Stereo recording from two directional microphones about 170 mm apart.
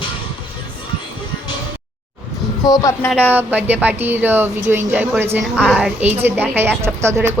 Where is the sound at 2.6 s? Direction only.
20° left (ahead or behind).